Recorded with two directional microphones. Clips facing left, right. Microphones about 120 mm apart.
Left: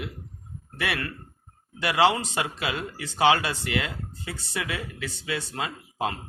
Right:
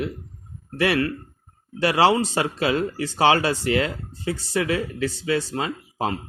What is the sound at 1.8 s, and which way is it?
Speech, 35° right (ahead or behind).